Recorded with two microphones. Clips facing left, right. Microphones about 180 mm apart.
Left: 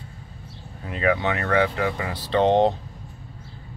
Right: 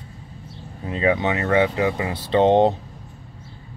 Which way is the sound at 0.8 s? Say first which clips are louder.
Right 2 dB; 25° right (ahead or behind).